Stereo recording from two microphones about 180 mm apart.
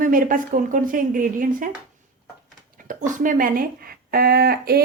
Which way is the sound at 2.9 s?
45° right (ahead or behind).